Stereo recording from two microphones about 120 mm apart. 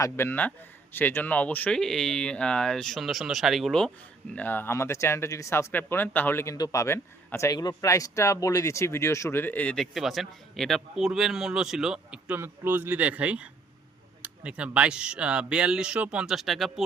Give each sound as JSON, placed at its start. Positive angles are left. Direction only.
{"t": 0.0, "sound": "a man's voice", "side_deg": 20}
{"t": 4.4, "sound": "speech", "side_deg": 15}